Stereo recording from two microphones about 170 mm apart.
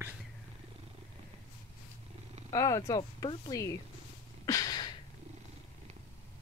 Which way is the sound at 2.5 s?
20° left (ahead or behind).